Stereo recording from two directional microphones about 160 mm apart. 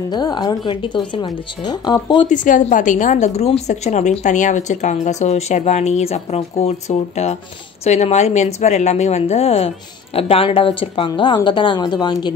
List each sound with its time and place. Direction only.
0.1 s speech: 25° left (ahead or behind)
2.2 s a woman's voice: 55° left (ahead or behind); by 12.3 s 25° left (ahead or behind)